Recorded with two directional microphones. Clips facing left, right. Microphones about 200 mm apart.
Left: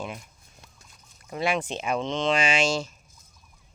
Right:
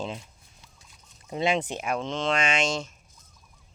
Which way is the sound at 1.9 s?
5° right (ahead or behind).